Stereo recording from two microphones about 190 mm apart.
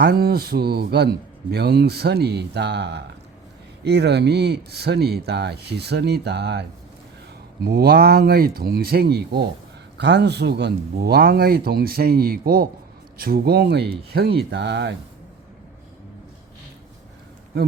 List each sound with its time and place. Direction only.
0.0 s a man's voice: 55° right (ahead or behind)